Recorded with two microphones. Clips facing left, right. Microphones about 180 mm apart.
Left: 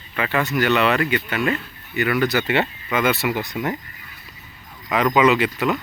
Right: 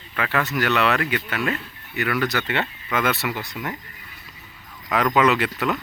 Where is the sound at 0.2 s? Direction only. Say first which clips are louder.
Left 3 dB; centre (ahead or behind).